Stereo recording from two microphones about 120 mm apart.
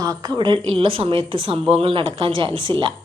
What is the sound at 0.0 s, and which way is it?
A woman's voice, 30° right (ahead or behind).